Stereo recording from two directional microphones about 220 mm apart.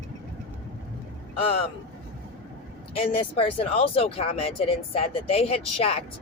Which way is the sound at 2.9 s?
25° left (ahead or behind).